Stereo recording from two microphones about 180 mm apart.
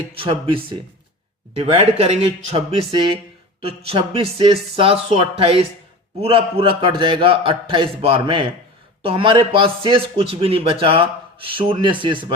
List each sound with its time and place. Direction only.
0.2 s a man's voice: 30° right (ahead or behind)